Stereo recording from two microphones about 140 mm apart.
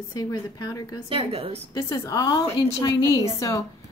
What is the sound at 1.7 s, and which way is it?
A woman's voice, 30° left (ahead or behind).